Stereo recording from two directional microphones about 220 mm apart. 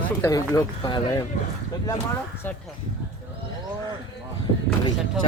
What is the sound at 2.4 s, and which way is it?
Speech, 10° left (ahead or behind).